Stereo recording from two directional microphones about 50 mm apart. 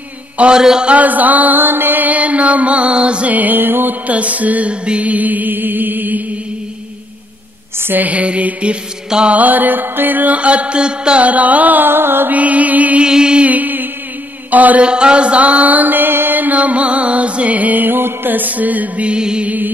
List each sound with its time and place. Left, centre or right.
0.6 s music: centre
0.8 s mantra: right
4.1 s mantra: right
7.9 s mantra: right
11.9 s music: right
12.4 s mantra: right
13.0 s music: centre
13.5 s music: right
14.5 s mantra: right
14.9 s mantra: centre